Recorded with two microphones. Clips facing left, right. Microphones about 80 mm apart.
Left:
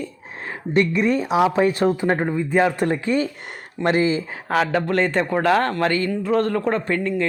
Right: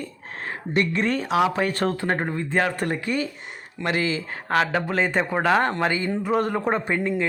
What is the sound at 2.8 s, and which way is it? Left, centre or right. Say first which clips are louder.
Speech: left 5 dB; left.